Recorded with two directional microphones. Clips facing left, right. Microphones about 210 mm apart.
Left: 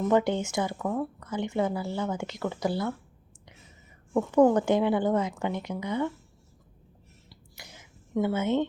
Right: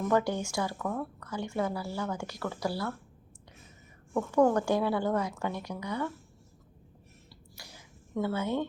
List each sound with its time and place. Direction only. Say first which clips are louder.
0.1 s a woman's voice: left 3 dB; 20° left (ahead or behind)
4.1 s a woman's voice: left 4 dB; 20° left (ahead or behind)
7.3 s a sound: left 2 dB; 20° left (ahead or behind)